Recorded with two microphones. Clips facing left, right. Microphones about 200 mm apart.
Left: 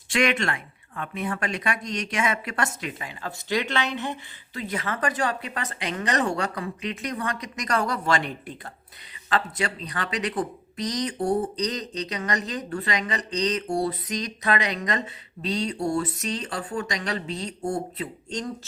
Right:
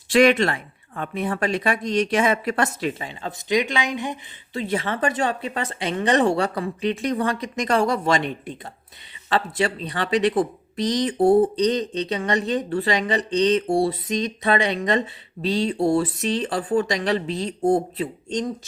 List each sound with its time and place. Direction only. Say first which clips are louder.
0.1 s speech: right 8 dB; 35° right (ahead or behind); by 4.2 s 15° right (ahead or behind)
4.5 s speech: right 5 dB; 30° right (ahead or behind)
16.6 s speech: right 8 dB; 35° right (ahead or behind)